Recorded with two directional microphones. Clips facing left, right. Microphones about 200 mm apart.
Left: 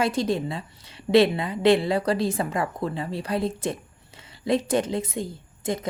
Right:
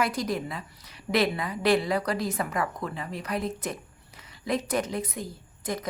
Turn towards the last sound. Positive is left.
turn(degrees=25)  # may be behind; listen again after turning